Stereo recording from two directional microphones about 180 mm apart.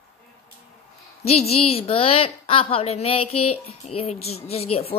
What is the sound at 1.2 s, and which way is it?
A woman's voice, 35° left (ahead or behind).